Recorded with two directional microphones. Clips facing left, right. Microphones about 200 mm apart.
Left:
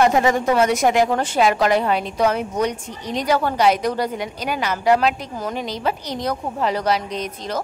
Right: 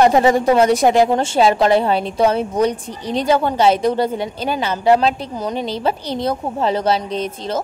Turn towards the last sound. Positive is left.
turn(degrees=-30)  # may be behind; listen again after turning